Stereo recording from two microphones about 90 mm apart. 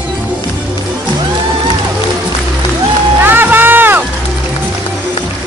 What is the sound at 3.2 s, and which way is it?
Music, 20° right (ahead or behind).